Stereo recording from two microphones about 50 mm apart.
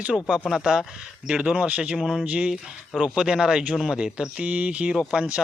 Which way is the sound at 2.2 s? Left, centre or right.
Right.